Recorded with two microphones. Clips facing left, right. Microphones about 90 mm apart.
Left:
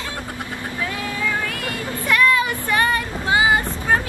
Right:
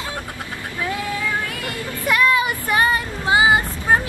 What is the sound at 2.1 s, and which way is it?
Child singing, 15° right (ahead or behind).